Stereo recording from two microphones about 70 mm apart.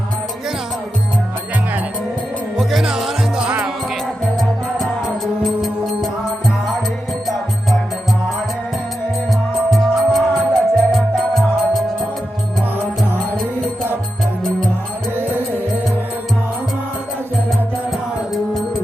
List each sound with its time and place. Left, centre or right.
2.6 s music: centre
4.4 s music: centre
9.6 s music: centre
15.1 s music: right